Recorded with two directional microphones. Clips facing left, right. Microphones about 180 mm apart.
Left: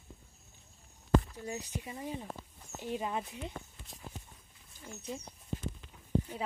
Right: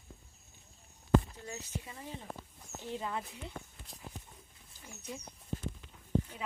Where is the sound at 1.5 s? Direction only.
15° left (ahead or behind).